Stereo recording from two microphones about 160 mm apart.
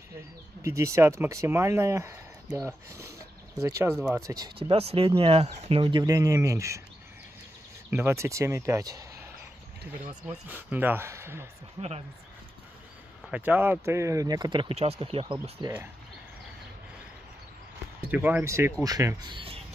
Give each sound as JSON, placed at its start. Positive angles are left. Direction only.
{"t": 0.6, "sound": "speech", "side_deg": -20}
{"t": 4.6, "sound": "speech", "side_deg": -40}
{"t": 7.9, "sound": "speech", "side_deg": -15}
{"t": 13.3, "sound": "speech", "side_deg": -10}
{"t": 18.1, "sound": "speech", "side_deg": -10}